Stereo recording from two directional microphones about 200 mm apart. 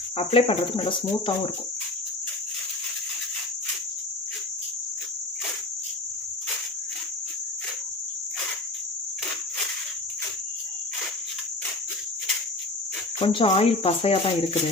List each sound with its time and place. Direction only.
0.2 s cricket: 30° left (ahead or behind)
13.1 s cricket: 25° left (ahead or behind)